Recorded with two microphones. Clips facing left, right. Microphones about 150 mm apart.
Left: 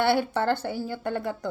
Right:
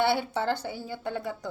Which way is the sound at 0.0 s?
55° left (ahead or behind).